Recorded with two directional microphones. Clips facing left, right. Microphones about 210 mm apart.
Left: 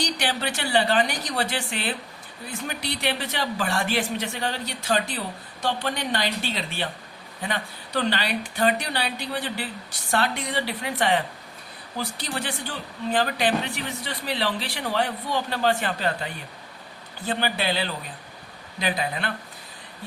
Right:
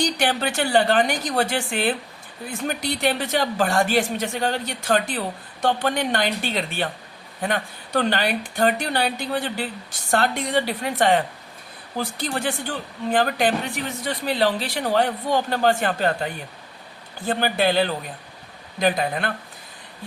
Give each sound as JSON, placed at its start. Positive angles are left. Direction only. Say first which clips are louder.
{"t": 0.0, "sound": "a woman's voice", "louder": "right 5 dB", "side_deg": -50}